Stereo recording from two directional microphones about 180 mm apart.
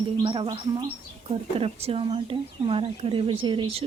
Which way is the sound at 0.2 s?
25° right (ahead or behind).